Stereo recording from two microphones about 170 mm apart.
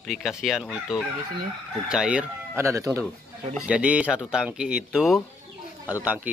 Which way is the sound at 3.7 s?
5° right (ahead or behind).